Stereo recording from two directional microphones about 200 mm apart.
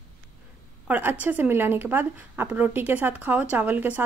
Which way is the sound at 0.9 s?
10° right (ahead or behind).